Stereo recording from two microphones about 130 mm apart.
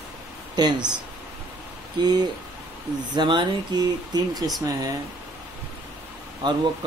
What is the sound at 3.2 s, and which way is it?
Speech, 40° right (ahead or behind).